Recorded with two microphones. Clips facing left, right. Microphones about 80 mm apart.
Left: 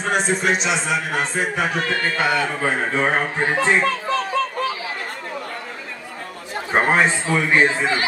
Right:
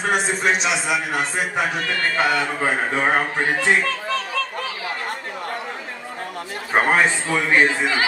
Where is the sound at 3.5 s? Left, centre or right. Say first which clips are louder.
Left 2 dB; left.